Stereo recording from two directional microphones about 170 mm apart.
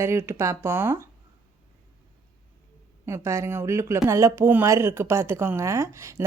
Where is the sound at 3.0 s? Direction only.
15° right (ahead or behind).